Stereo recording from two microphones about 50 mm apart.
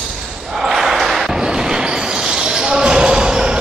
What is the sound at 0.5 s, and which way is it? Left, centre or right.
Basketball bounce, centre.